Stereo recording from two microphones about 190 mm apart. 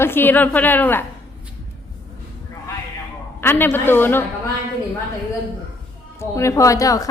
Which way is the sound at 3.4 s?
10° left (ahead or behind).